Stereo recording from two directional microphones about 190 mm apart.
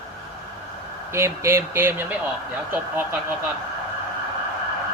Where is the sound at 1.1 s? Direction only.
15° right (ahead or behind).